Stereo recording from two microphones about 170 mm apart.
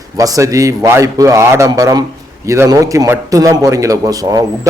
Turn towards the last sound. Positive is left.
turn(degrees=-20)  # may be behind; listen again after turning